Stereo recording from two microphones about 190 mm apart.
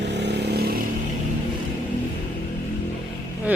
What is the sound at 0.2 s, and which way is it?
Vehicle, 60° right (ahead or behind).